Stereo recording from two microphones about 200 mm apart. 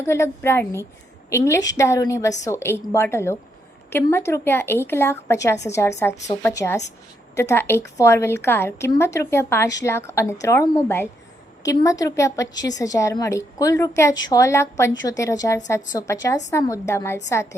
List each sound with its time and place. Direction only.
0.0 s a woman's voice: 15° left (ahead or behind)